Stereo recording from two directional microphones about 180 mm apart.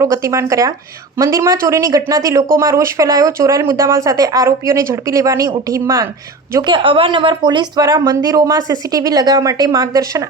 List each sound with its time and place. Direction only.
0.0 s speech: 15° right (ahead or behind)
6.7 s speech: 25° right (ahead or behind)